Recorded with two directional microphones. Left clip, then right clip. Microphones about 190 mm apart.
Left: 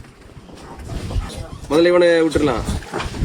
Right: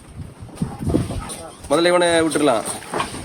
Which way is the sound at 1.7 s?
25° right (ahead or behind).